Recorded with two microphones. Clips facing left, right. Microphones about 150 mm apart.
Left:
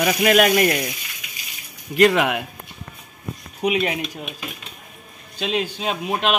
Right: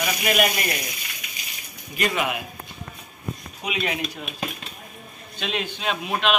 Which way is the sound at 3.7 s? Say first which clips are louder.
Left 5 dB; 25° left (ahead or behind).